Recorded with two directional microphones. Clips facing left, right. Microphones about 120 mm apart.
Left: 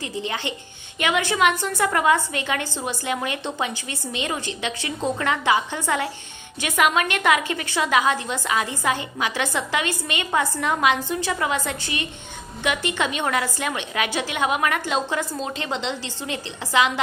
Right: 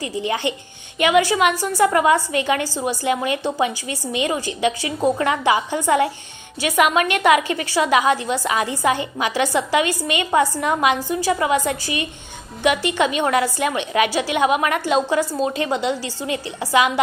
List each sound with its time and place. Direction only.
0.0 s a woman's voice: 15° right (ahead or behind)
7.1 s a woman's voice: 15° right (ahead or behind)
14.6 s a woman's voice: 20° right (ahead or behind)
15.1 s a woman's voice: 10° right (ahead or behind)